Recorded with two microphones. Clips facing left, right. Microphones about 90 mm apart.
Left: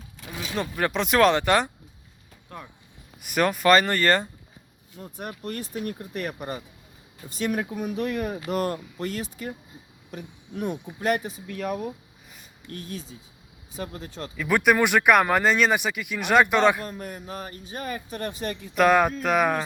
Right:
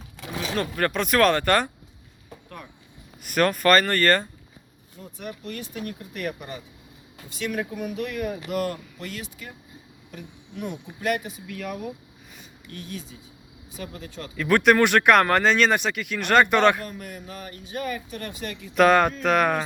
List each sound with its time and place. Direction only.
0.2 s a sound: 80° right
0.5 s speech: 15° left (ahead or behind)
3.2 s speech: 15° left (ahead or behind)
5.1 s speech: 45° left (ahead or behind)
7.9 s speech: 30° left (ahead or behind)
12.6 s speech: 40° left (ahead or behind)
14.3 s speech: 10° left (ahead or behind)
16.8 s speech: 30° left (ahead or behind)
18.7 s speech: 5° left (ahead or behind)